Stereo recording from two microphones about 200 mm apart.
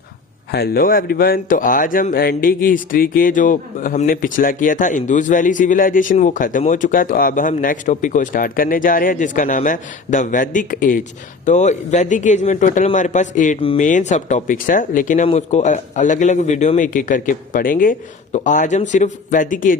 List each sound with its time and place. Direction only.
0.5 s a man's voice: 50° left (ahead or behind)